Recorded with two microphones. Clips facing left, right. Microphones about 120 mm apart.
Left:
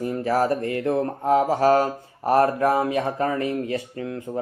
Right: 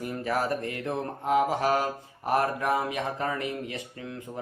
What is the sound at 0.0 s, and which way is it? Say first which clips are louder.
Speech: left 7 dB; 30° left (ahead or behind).